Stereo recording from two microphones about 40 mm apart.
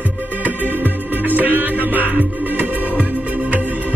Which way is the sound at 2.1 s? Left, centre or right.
Right.